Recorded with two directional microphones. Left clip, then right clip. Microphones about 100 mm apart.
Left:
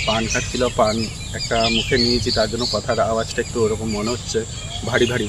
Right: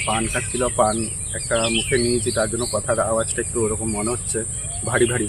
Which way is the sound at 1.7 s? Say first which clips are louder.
Left 2 dB; 40° right (ahead or behind).